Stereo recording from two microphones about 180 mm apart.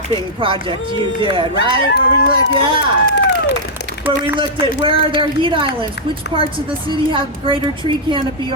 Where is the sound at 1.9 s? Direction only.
65° left (ahead or behind).